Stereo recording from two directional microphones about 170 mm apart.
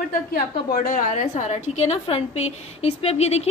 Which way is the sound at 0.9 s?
50° left (ahead or behind).